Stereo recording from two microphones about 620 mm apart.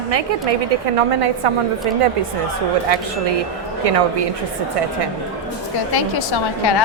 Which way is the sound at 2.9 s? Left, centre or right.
Right.